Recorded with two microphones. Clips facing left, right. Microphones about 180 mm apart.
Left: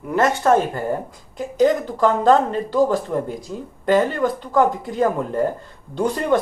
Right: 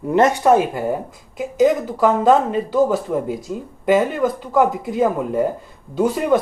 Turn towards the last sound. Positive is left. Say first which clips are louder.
# right 2 dB
turn(degrees=-5)  # may be behind; listen again after turning